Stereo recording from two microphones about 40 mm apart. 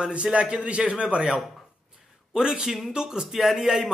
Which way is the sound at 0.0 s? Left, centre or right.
Right.